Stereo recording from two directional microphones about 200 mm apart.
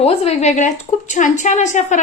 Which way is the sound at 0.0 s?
30° left (ahead or behind).